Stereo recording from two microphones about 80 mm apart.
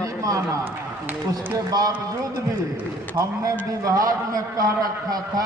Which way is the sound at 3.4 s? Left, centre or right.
Right.